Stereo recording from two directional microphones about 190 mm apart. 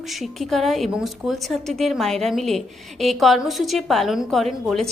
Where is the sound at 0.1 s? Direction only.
Centre (ahead or behind).